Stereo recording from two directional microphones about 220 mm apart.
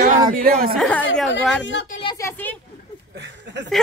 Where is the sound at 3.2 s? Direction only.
55° right (ahead or behind).